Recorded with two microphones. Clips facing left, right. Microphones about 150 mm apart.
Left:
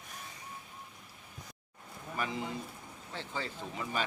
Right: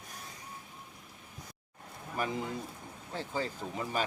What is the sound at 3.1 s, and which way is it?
Speech, 40° right (ahead or behind).